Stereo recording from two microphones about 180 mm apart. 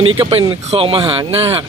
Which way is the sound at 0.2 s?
30° right (ahead or behind).